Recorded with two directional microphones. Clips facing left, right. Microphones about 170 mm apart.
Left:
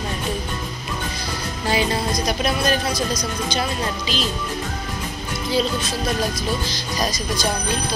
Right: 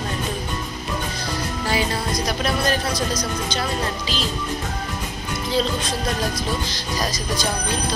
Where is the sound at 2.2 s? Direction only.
15° left (ahead or behind).